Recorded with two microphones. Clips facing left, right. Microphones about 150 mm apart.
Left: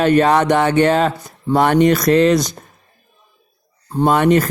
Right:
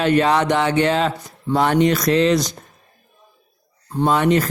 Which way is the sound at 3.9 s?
50° left (ahead or behind).